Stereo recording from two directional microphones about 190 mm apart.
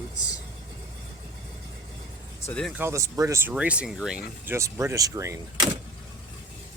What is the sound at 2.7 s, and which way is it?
Speech, 10° right (ahead or behind).